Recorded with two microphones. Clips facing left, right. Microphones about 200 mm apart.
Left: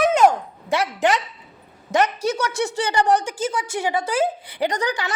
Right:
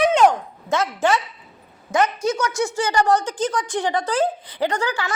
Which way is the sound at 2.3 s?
35° left (ahead or behind).